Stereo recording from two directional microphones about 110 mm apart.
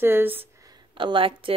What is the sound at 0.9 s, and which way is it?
Speech, 50° right (ahead or behind).